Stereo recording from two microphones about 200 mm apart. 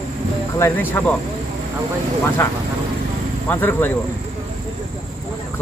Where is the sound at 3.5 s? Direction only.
10° left (ahead or behind).